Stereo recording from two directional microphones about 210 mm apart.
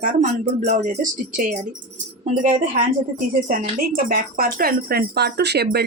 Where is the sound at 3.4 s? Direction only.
45° right (ahead or behind).